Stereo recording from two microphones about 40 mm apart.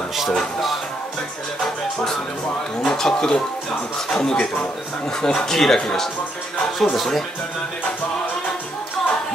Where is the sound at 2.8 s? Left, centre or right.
Centre.